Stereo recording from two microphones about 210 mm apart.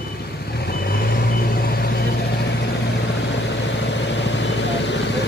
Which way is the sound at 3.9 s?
55° left (ahead or behind).